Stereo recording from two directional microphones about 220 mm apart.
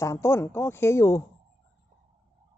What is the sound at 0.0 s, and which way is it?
Speech, 10° left (ahead or behind).